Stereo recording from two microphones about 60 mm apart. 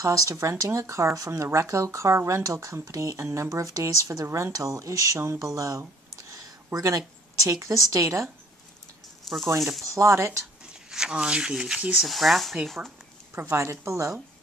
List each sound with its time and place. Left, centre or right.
0.0 s speech: right
6.3 s a sound: right
7.4 s speech: right
9.3 s speech: centre
9.9 s speech: right
10.6 s speech: centre
13.3 s speech: right